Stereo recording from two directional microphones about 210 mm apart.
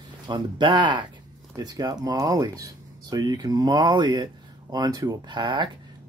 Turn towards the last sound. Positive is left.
turn(degrees=-20)  # may be behind; listen again after turning